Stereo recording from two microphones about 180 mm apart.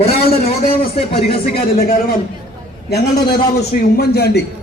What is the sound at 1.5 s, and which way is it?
A man's voice, 60° left (ahead or behind).